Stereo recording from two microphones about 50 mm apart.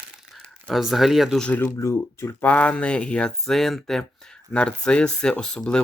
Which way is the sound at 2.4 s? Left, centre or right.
Left.